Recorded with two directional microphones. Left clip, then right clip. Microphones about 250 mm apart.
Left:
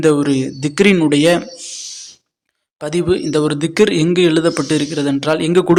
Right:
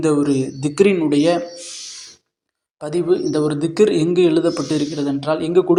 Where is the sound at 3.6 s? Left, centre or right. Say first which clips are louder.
Even; left.